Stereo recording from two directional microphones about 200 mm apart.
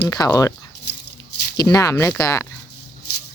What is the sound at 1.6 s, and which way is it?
Speech, 20° left (ahead or behind).